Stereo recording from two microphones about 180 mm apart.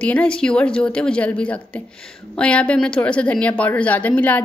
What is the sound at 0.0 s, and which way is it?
A woman's voice, 5° left (ahead or behind).